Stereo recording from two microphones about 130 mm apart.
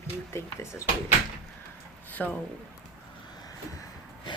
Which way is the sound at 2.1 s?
15° left (ahead or behind).